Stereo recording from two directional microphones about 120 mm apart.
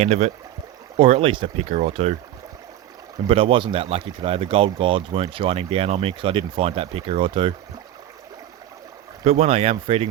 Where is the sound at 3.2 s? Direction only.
50° right (ahead or behind).